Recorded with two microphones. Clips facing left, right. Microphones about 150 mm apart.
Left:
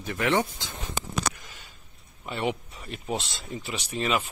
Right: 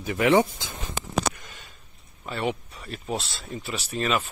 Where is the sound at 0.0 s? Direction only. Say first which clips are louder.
Right 5 dB; 10° right (ahead or behind).